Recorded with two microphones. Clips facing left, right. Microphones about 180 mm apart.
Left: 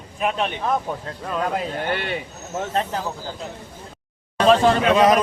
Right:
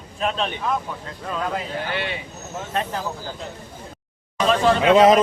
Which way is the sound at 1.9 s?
50° left (ahead or behind).